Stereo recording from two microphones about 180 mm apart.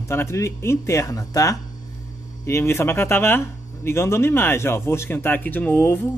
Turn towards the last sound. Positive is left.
turn(degrees=10)  # may be behind; listen again after turning